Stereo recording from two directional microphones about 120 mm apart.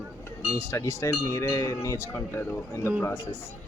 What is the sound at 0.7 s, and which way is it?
Cowbell, 20° left (ahead or behind).